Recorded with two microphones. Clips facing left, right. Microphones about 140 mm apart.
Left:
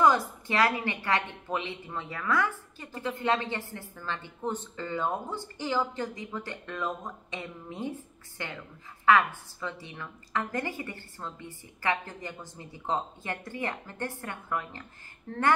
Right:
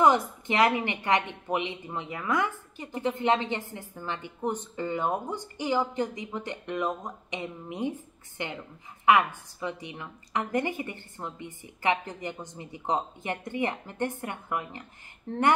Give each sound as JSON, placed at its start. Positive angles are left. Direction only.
{"t": 0.0, "sound": "a woman's voice", "side_deg": -20}